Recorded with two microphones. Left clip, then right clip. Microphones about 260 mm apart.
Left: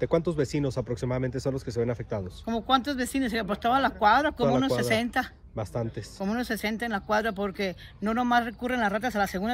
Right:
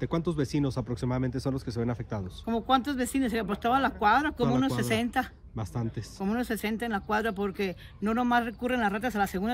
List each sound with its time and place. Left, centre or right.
0.0 s speech: centre
5.0 s speech: centre